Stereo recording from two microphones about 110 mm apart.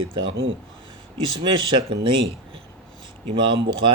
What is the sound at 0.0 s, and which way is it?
Speech, 50° right (ahead or behind).